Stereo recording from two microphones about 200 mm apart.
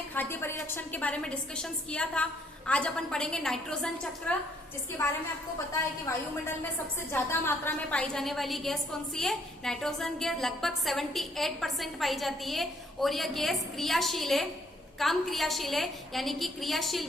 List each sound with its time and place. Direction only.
0.1 s a woman's voice: 10° left (ahead or behind)
7.1 s a woman's voice: 10° left (ahead or behind)